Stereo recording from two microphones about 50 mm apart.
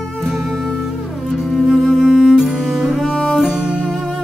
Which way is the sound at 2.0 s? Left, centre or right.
Centre.